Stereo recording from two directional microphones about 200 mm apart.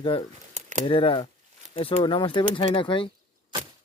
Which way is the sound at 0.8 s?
25° left (ahead or behind).